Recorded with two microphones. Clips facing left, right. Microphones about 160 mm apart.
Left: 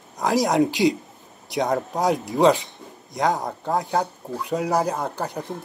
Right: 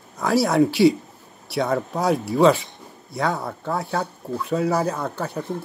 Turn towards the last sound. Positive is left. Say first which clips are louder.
# even
turn(degrees=15)  # may be behind; listen again after turning